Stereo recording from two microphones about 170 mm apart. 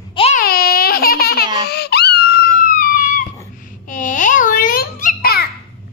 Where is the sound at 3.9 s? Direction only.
50° left (ahead or behind).